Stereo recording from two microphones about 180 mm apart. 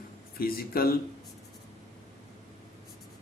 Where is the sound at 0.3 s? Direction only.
55° left (ahead or behind).